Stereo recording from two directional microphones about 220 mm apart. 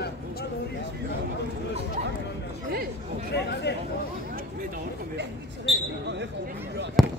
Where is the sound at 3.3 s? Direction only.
50° left (ahead or behind).